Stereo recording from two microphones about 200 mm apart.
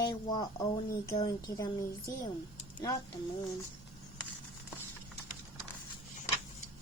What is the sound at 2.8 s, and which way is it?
Speech, 15° left (ahead or behind).